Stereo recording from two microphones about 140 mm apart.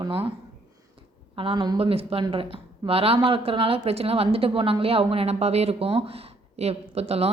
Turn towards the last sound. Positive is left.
turn(degrees=-45)  # may be behind; listen again after turning